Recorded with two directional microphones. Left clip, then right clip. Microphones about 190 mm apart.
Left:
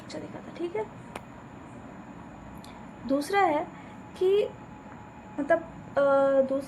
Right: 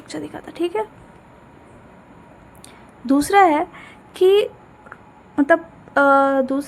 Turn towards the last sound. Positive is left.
turn(degrees=-45)  # may be behind; listen again after turning